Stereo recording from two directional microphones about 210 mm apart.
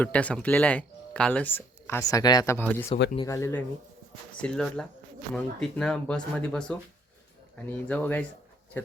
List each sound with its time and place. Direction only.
0.0 s speech: 5° left (ahead or behind)